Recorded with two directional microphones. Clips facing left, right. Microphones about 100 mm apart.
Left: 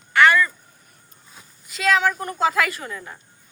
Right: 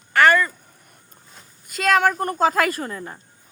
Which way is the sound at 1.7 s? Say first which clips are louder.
Right 2 dB; 50° right (ahead or behind).